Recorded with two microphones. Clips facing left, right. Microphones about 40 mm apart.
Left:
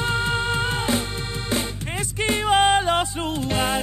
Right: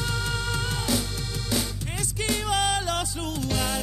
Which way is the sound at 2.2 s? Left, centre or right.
Left.